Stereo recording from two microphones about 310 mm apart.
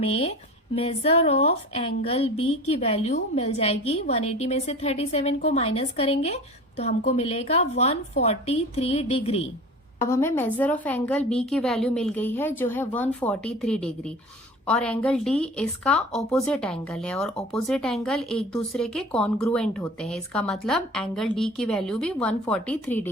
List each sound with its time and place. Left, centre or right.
0.0 s a woman's voice: centre
10.1 s speech: centre